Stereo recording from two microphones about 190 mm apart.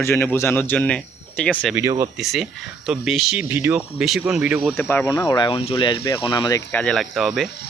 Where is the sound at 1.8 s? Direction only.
15° right (ahead or behind).